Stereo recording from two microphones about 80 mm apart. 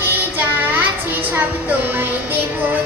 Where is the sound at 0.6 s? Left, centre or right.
Right.